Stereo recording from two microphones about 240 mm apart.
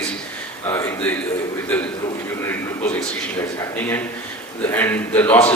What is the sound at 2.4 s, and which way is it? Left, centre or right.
A man's voice, centre.